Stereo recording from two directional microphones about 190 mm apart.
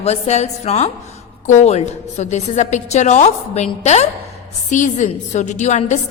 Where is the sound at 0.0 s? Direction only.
35° left (ahead or behind).